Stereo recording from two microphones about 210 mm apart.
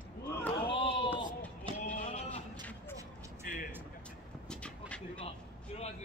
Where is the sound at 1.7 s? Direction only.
25° right (ahead or behind).